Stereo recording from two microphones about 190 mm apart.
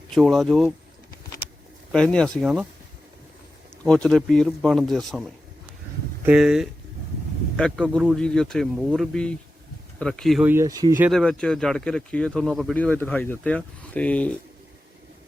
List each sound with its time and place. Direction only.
0.1 s speech: centre (ahead or behind)
1.9 s speech: centre (ahead or behind)
3.8 s speech: 5° left (ahead or behind)
10.5 s speech: 15° right (ahead or behind)
11.1 s speech: 5° left (ahead or behind)